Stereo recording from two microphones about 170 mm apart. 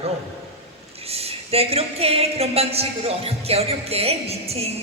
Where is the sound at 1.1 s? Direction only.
35° right (ahead or behind).